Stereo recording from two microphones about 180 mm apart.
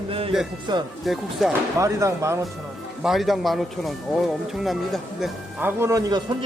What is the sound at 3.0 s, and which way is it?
Speech, centre (ahead or behind).